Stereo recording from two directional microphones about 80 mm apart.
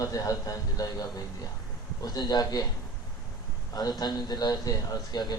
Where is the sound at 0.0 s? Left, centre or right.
Left.